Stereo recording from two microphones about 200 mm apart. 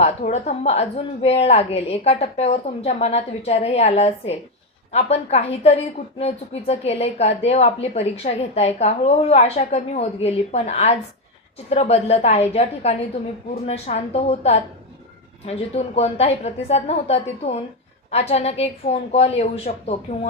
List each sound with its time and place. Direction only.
0.0 s a woman's voice: 35° left (ahead or behind)